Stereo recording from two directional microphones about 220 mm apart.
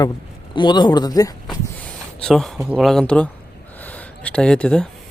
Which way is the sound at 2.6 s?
5° right (ahead or behind).